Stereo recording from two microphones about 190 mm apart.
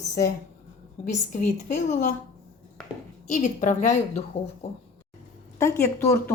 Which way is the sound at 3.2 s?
40° left (ahead or behind).